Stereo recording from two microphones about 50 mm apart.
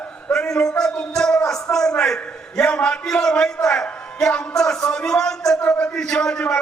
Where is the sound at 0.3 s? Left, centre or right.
Centre.